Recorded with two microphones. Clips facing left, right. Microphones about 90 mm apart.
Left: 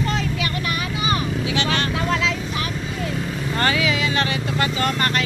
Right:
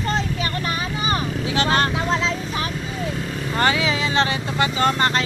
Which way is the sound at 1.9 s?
25° right (ahead or behind).